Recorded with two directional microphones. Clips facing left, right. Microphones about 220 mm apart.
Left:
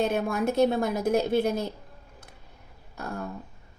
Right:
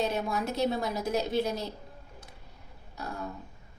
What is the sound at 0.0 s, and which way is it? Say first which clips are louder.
Speech: left 5 dB; 50° left (ahead or behind).